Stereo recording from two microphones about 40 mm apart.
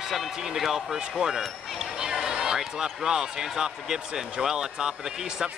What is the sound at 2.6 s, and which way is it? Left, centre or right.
Speech, centre.